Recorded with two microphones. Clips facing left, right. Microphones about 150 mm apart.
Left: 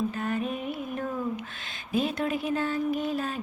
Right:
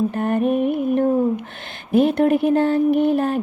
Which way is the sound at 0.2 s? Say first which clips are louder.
Right 11 dB; 60° right (ahead or behind).